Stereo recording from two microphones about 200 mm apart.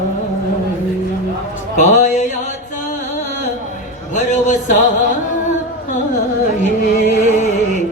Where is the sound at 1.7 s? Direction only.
35° left (ahead or behind).